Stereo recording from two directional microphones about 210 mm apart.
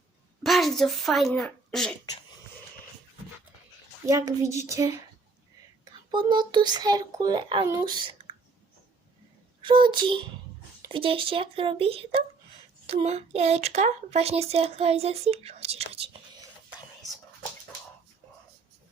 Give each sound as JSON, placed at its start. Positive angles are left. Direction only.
{"t": 0.4, "sound": "speech", "side_deg": 0}
{"t": 4.0, "sound": "speech", "side_deg": -15}
{"t": 9.6, "sound": "a child's voice", "side_deg": -25}